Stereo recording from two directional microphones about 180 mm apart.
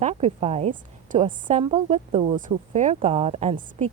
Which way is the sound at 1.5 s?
35° right (ahead or behind).